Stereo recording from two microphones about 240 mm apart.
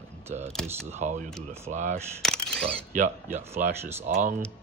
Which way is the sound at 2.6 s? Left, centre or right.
Right.